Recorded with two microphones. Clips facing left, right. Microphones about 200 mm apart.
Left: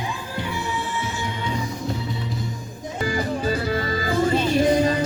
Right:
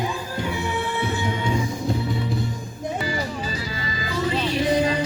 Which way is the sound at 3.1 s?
55° left (ahead or behind).